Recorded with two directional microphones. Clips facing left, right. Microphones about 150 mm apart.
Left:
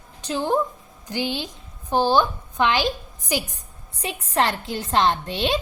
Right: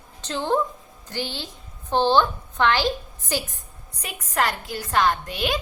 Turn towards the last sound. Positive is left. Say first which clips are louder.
# left 2 dB
turn(degrees=25)  # may be behind; listen again after turning